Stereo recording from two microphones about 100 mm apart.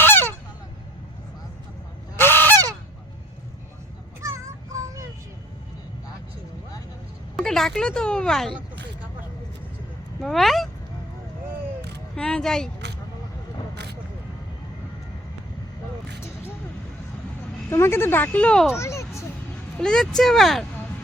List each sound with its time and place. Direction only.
0.0 s honk: 20° left (ahead or behind)
2.1 s goose: 20° left (ahead or behind)
4.3 s child singing: 30° right (ahead or behind)
7.3 s speech: 5° left (ahead or behind)
10.2 s speech: centre (ahead or behind)
12.1 s speech: 10° left (ahead or behind)
17.7 s speech: 25° left (ahead or behind)
18.8 s a sound: 30° left (ahead or behind)
19.7 s speech: 5° left (ahead or behind)